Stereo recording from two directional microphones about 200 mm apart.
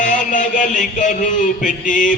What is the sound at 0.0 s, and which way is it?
Music, 40° left (ahead or behind).